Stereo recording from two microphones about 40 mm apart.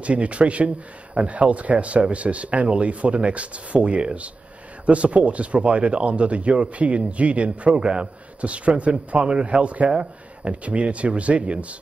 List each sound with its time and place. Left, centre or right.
0.0 s speech: right